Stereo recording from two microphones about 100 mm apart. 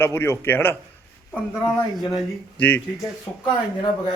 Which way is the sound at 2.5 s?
15° left (ahead or behind).